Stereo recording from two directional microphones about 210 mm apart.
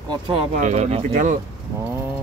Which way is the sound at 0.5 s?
35° right (ahead or behind).